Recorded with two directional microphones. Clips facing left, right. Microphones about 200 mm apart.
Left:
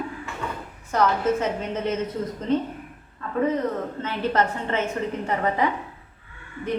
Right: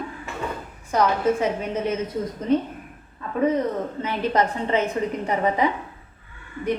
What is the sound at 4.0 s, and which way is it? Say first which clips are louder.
A woman's voice: right 1 dB; 15° right (ahead or behind).